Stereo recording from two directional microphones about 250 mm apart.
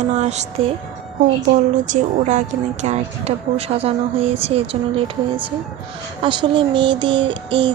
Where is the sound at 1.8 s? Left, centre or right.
Right.